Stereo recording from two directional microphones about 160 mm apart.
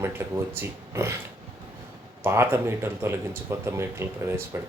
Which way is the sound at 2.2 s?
15° right (ahead or behind).